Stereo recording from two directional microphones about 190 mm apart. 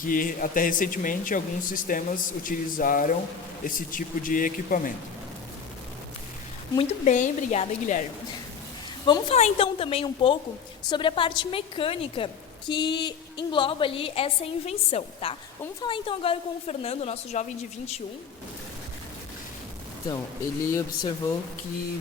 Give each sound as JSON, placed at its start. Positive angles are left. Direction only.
{"t": 0.0, "sound": "speech", "side_deg": 45}
{"t": 6.7, "sound": "a woman's voice", "side_deg": 40}
{"t": 9.0, "sound": "a woman's voice", "side_deg": 25}
{"t": 20.7, "sound": "speech", "side_deg": 15}